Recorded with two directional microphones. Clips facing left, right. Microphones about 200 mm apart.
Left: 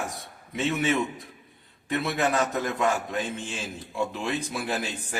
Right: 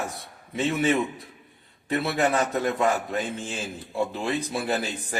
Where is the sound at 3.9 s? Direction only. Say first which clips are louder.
Right 2 dB; 35° right (ahead or behind).